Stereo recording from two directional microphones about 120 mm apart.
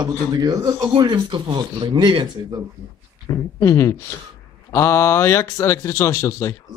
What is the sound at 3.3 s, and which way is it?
Speech, 25° left (ahead or behind).